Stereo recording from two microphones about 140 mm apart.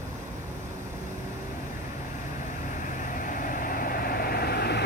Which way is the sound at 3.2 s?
75° left (ahead or behind).